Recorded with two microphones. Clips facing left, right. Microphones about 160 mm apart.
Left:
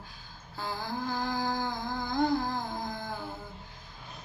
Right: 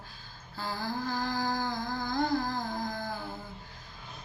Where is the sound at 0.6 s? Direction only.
15° left (ahead or behind).